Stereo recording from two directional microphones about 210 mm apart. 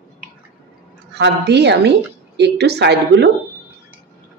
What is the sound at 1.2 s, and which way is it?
A woman's voice, 55° right (ahead or behind).